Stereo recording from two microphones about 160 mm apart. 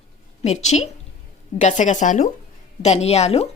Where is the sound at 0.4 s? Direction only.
45° left (ahead or behind).